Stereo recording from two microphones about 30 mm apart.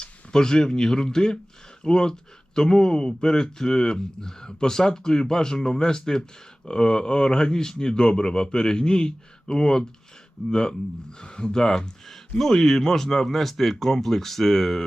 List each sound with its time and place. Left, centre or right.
0.0 s speech: left